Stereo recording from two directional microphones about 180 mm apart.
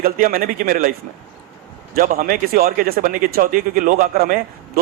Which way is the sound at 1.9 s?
55° right (ahead or behind).